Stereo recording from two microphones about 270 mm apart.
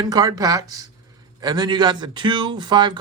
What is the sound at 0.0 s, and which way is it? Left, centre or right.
Speech, centre.